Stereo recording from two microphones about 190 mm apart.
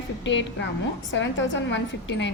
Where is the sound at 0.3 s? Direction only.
70° left (ahead or behind).